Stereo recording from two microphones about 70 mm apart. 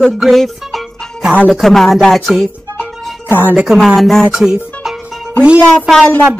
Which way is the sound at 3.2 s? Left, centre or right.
Left.